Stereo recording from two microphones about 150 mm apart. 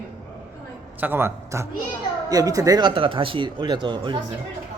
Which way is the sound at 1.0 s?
15° right (ahead or behind).